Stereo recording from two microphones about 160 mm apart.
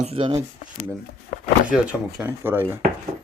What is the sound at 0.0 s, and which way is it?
Speech, 40° right (ahead or behind).